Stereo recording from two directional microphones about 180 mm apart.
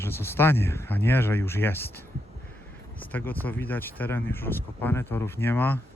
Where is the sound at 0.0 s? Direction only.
15° left (ahead or behind).